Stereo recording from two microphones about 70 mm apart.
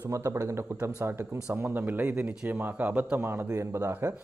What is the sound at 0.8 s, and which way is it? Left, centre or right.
Speech, right.